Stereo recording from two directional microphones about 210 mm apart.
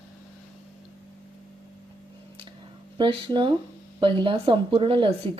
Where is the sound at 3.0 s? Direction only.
25° right (ahead or behind).